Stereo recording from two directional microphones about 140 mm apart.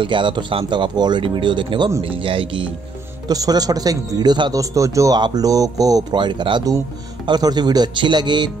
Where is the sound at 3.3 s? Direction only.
25° right (ahead or behind).